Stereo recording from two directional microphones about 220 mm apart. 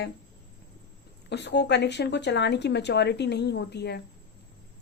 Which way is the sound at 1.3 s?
50° left (ahead or behind).